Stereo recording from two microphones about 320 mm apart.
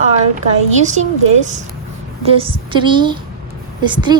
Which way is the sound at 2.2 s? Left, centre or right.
Centre.